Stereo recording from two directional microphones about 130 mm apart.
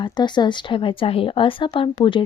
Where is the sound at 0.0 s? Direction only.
35° left (ahead or behind).